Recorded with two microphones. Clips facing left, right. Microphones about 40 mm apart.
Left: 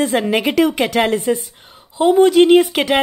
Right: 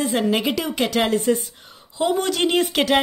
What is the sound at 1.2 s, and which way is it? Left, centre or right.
Speech, left.